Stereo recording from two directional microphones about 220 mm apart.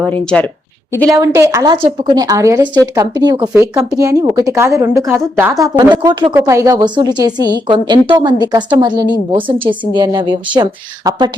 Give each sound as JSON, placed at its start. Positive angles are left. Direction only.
{"t": 0.0, "sound": "speech", "side_deg": 5}
{"t": 1.2, "sound": "a woman's voice", "side_deg": -15}